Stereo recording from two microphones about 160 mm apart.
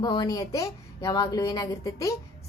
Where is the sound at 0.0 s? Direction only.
25° left (ahead or behind).